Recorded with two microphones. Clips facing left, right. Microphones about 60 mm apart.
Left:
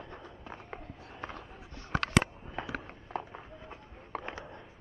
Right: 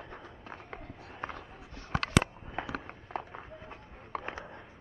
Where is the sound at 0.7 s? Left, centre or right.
Right.